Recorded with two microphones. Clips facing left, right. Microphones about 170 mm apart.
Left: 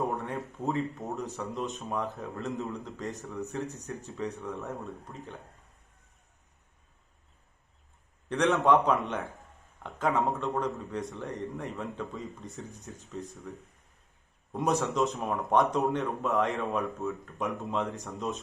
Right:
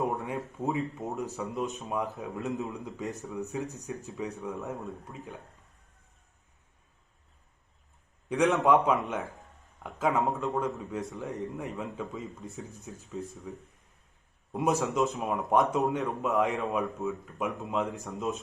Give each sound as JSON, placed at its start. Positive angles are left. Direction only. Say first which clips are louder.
{"t": 0.2, "sound": "speech", "louder": "right 1 dB", "side_deg": -10}
{"t": 4.6, "sound": "speech", "louder": "right 1 dB", "side_deg": 0}
{"t": 8.3, "sound": "a man's voice", "louder": "even", "side_deg": 0}